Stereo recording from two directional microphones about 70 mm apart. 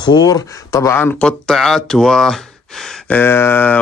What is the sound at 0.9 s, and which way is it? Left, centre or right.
Speech, left.